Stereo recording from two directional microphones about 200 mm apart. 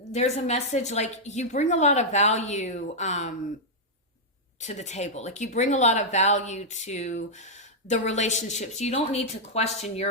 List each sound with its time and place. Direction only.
0.1 s speech: 35° left (ahead or behind)
4.6 s speech: 35° left (ahead or behind)